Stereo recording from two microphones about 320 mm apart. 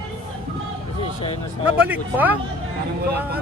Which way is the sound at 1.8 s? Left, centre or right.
Centre.